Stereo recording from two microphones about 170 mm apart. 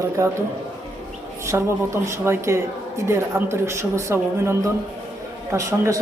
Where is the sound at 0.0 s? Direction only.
15° right (ahead or behind).